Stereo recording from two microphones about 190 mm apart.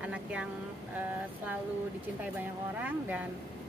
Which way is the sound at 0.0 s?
5° right (ahead or behind).